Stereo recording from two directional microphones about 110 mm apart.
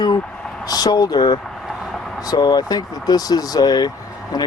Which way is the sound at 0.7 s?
35° left (ahead or behind).